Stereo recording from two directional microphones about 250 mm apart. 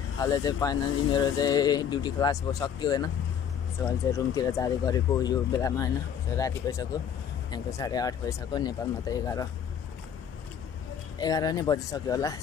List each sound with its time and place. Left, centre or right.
0.2 s speech: centre
11.1 s speech: centre